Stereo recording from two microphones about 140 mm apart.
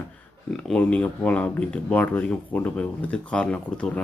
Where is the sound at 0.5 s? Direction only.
5° left (ahead or behind).